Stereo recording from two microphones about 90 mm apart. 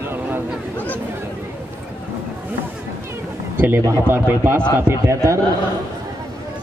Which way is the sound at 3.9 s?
25° right (ahead or behind).